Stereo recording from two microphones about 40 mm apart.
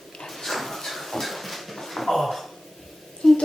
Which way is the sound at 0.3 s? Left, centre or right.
Centre.